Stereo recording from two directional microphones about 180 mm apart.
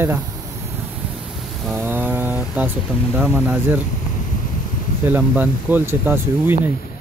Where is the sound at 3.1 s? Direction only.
5° right (ahead or behind).